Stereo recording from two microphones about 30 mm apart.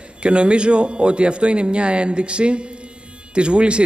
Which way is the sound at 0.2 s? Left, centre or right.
Right.